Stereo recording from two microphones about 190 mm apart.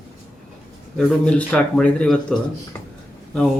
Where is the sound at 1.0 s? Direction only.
5° left (ahead or behind).